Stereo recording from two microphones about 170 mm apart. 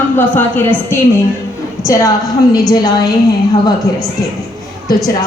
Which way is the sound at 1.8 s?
20° left (ahead or behind).